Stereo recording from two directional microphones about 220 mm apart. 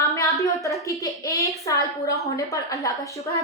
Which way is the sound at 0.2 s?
15° left (ahead or behind).